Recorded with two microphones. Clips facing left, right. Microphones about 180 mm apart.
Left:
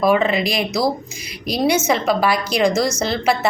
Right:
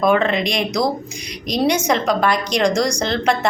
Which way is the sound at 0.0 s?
5° left (ahead or behind).